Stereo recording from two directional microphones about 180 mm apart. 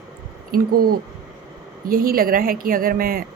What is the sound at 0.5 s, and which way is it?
A woman's voice, 55° right (ahead or behind).